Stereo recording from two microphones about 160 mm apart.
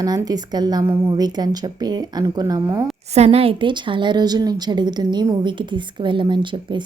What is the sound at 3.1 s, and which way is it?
A woman's voice, 40° right (ahead or behind).